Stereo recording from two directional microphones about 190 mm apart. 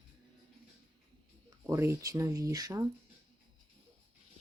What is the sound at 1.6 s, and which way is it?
Speech, 15° right (ahead or behind).